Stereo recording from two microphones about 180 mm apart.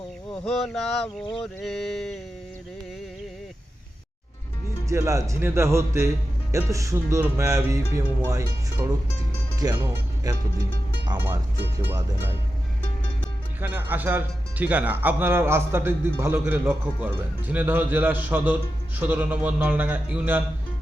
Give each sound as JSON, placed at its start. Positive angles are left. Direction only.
{"t": 0.4, "sound": "speech", "side_deg": 0}
{"t": 4.9, "sound": "speech", "side_deg": -15}
{"t": 13.6, "sound": "speech", "side_deg": -10}